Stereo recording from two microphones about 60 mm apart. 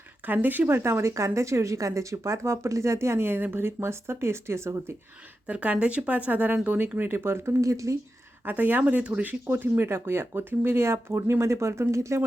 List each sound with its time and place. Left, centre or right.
0.3 s speech: right
5.5 s speech: right
7.6 s speech: right
8.4 s speech: right
9.5 s speech: right